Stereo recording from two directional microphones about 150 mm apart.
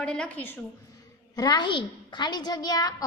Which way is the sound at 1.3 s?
25° left (ahead or behind).